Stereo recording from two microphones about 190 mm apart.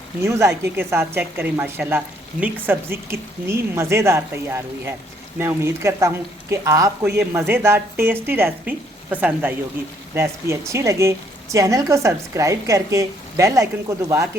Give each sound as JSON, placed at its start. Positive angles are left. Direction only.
{"t": 0.2, "sound": "a woman's voice", "side_deg": -15}